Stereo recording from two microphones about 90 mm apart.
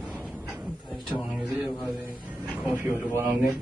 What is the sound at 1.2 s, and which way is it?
Speech, 5° right (ahead or behind).